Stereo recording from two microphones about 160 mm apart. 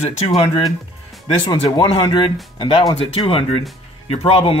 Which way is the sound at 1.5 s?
25° left (ahead or behind).